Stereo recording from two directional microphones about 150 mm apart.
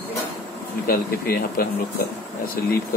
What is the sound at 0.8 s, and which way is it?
Speech, 80° left.